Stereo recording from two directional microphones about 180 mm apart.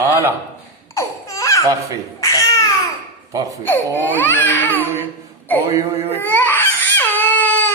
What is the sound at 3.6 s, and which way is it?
Baby cry, 10° left (ahead or behind).